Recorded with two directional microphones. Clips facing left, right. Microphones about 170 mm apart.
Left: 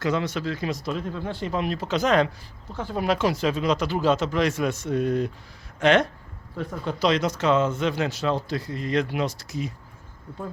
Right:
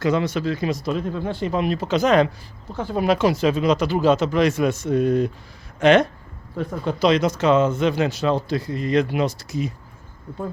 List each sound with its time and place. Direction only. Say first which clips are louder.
0.0 s speech: right 4 dB; 10° right (ahead or behind)